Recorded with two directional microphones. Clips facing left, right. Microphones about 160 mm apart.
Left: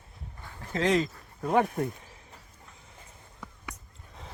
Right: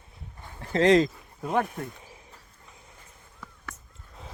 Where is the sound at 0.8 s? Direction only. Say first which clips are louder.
Right 6 dB; 90° right.